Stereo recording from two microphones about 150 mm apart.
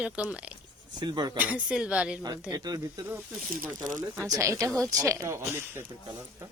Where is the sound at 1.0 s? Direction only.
30° right (ahead or behind).